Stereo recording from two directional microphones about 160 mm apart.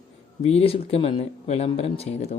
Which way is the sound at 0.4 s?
40° left (ahead or behind).